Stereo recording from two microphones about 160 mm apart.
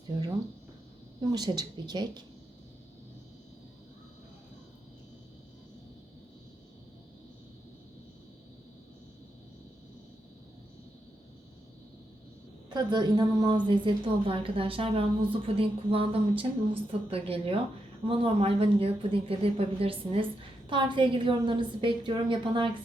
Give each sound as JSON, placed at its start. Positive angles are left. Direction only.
{"t": 1.3, "sound": "a woman's voice", "side_deg": -25}
{"t": 12.7, "sound": "a woman's voice", "side_deg": -25}